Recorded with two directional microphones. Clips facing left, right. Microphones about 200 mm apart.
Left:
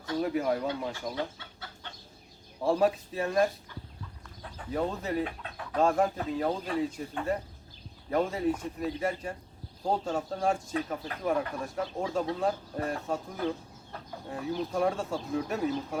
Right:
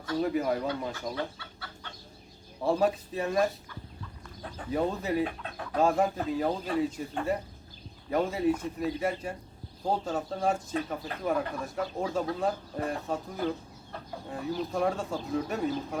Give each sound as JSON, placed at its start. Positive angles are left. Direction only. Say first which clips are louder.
{"t": 0.2, "sound": "speech", "louder": "even", "side_deg": 0}
{"t": 1.1, "sound": "chicken", "louder": "even", "side_deg": 20}
{"t": 2.6, "sound": "speech", "louder": "left 1 dB", "side_deg": 0}
{"t": 4.7, "sound": "speech", "louder": "right 2 dB", "side_deg": -5}
{"t": 8.1, "sound": "speech", "louder": "right 1 dB", "side_deg": -5}